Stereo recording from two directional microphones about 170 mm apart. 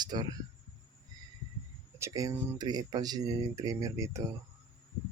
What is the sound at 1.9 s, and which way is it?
Speech, 15° right (ahead or behind).